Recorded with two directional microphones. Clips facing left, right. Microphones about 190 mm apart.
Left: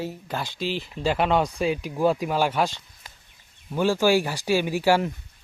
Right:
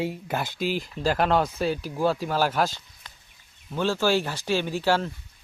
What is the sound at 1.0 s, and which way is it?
Speech, centre (ahead or behind).